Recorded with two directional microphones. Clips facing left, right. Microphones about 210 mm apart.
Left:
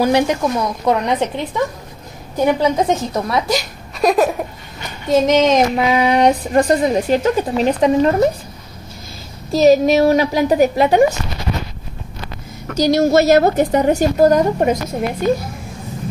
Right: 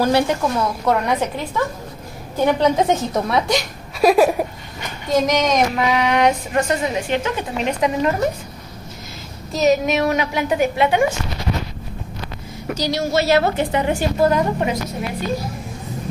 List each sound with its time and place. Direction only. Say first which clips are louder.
0.0 s a woman's voice: left 2 dB; 15° left (ahead or behind)
2.3 s a woman's voice: left 1 dB; 10° left (ahead or behind)
2.8 s a woman's voice: left 1 dB; centre (ahead or behind)
5.1 s a woman's voice: left 5 dB; 25° left (ahead or behind)
9.5 s a woman's voice: left 6 dB; 30° left (ahead or behind)
12.7 s a woman's voice: left 8 dB; 45° left (ahead or behind)